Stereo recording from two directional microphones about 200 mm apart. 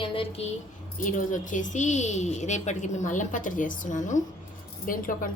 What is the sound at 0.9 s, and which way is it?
Speech, 40° left (ahead or behind).